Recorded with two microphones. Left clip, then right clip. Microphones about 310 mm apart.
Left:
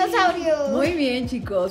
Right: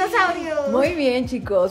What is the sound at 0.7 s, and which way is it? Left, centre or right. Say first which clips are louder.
Speech: right 3 dB; right.